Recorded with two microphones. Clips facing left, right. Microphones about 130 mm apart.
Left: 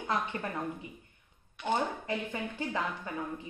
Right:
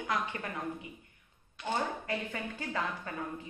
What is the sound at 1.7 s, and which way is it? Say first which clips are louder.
A woman's voice: left 2 dB; 15° left (ahead or behind).